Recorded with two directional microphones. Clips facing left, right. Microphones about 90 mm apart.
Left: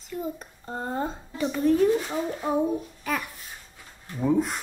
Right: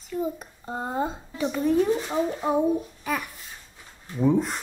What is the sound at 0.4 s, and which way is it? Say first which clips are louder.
A woman's voice: right 2 dB; 10° right (ahead or behind).